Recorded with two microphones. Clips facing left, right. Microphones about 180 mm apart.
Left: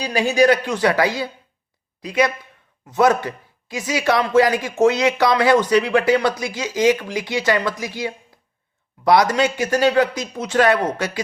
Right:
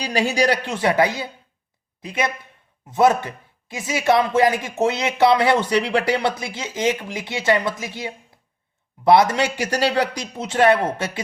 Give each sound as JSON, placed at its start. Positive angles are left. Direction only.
{"t": 0.0, "sound": "speech", "side_deg": -30}